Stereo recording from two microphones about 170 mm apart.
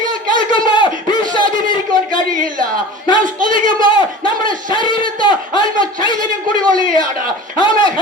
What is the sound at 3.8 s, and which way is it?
Speech, 30° left (ahead or behind).